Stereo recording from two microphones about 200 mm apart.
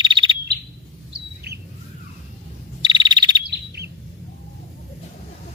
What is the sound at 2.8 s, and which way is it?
Bird, 20° right (ahead or behind).